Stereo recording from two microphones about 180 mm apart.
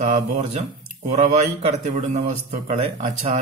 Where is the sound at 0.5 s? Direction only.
40° right (ahead or behind).